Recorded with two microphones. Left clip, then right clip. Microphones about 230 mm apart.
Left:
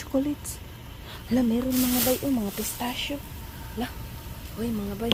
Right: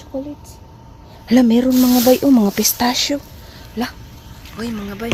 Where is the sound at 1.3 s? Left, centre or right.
Right.